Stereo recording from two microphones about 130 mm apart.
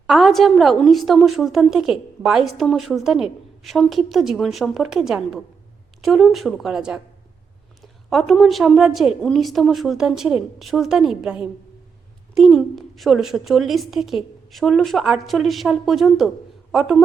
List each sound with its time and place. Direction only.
0.1 s a woman's voice: centre (ahead or behind)